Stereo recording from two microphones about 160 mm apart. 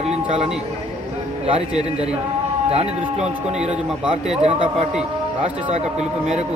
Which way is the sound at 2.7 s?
40° right (ahead or behind).